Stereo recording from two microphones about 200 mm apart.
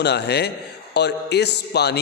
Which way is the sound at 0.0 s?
55° left (ahead or behind).